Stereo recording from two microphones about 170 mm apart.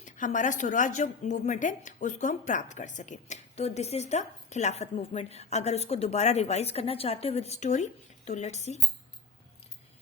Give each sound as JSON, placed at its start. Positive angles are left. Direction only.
{"t": 0.0, "sound": "speech", "side_deg": 50}